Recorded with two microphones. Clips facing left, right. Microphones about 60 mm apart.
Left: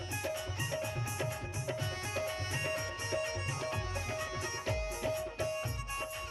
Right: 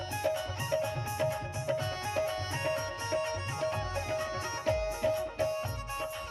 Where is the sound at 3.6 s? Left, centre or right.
Right.